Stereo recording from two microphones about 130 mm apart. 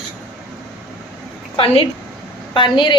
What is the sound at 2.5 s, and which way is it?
Speech, 40° left (ahead or behind).